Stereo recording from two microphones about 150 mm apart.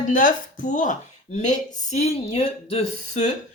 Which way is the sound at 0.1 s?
60° left (ahead or behind).